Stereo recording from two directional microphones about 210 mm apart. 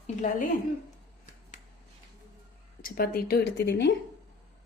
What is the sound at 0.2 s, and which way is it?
Speech, 40° left (ahead or behind).